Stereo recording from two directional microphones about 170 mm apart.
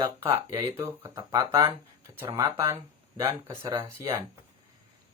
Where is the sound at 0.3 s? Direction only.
20° right (ahead or behind).